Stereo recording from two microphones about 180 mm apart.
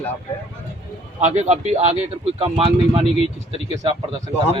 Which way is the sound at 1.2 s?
40° right (ahead or behind).